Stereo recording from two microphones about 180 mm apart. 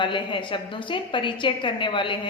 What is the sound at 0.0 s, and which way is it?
A woman's voice, 25° left (ahead or behind).